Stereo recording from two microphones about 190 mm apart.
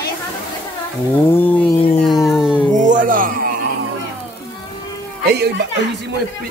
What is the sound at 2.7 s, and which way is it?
Speech, 40° right (ahead or behind).